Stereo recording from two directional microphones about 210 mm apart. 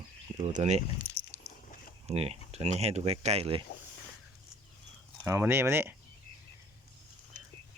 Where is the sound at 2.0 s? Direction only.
30° right (ahead or behind).